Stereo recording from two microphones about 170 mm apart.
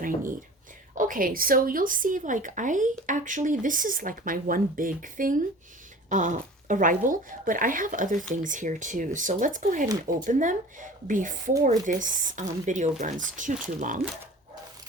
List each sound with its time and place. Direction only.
0.9 s speech: 55° right (ahead or behind)